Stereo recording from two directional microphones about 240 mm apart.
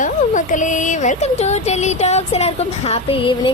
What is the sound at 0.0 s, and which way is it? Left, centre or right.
A woman's voice, left.